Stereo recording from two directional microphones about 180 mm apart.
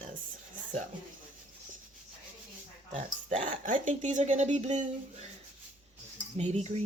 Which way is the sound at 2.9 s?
45° right (ahead or behind).